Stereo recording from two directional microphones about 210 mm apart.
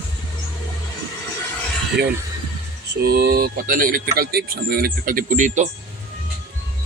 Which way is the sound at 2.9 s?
50° right (ahead or behind).